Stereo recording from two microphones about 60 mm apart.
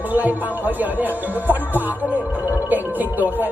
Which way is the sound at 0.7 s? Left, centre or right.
Right.